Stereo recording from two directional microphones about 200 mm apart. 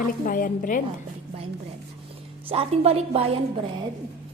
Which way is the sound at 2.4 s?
30° right (ahead or behind).